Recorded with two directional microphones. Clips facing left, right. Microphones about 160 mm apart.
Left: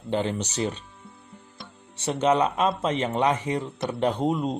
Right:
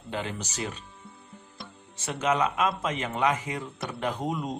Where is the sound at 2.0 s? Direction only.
30° left (ahead or behind).